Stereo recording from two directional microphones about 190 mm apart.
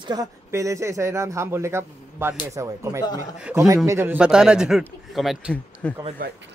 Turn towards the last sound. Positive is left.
turn(degrees=5)  # may be behind; listen again after turning